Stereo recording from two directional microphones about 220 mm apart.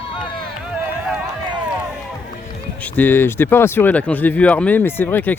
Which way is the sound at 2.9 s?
10° left (ahead or behind).